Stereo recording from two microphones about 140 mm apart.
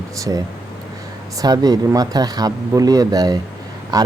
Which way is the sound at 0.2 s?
25° right (ahead or behind).